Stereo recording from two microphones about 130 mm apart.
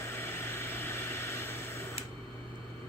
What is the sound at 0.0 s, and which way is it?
Vehicle, 20° left (ahead or behind).